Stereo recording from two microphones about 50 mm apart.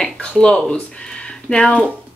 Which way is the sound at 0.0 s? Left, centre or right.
Centre.